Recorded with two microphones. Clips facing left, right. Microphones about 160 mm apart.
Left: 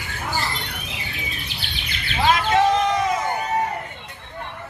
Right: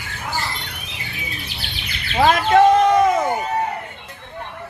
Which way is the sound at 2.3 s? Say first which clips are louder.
Right 4 dB; 55° right (ahead or behind).